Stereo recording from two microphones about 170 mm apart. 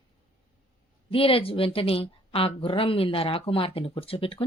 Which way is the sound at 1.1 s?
35° left (ahead or behind).